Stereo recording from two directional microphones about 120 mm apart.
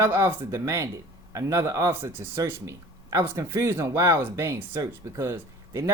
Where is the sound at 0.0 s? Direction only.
20° right (ahead or behind).